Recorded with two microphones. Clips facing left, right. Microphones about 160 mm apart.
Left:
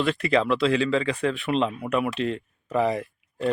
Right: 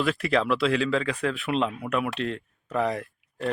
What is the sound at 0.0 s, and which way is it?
A man's voice, centre (ahead or behind).